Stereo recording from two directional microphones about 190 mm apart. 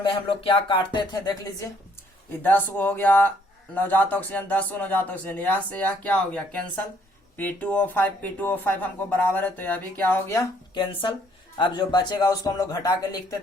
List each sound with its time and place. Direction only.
0.0 s a man's voice: 25° left (ahead or behind)